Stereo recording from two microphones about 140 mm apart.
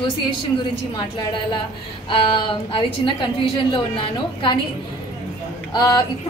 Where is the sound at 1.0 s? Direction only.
30° left (ahead or behind).